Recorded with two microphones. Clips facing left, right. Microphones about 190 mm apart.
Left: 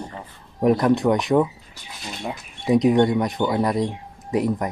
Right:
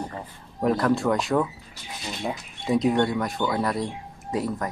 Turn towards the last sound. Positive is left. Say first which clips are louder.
# left 5 dB
turn(degrees=20)  # may be behind; listen again after turning